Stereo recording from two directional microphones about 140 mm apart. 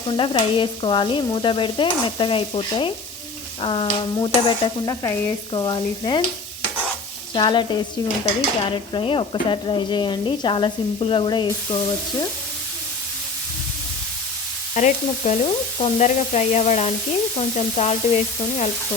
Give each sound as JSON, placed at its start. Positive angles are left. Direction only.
{"t": 0.2, "sound": "speech", "side_deg": 35}
{"t": 7.3, "sound": "speech", "side_deg": 35}
{"t": 14.8, "sound": "stir", "side_deg": 55}
{"t": 16.0, "sound": "sizzle", "side_deg": 55}